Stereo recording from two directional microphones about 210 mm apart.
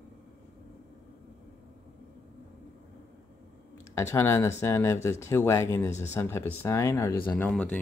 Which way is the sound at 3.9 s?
15° left (ahead or behind).